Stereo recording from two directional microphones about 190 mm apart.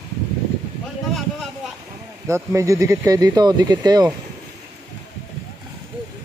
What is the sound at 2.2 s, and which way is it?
Speech, 15° right (ahead or behind).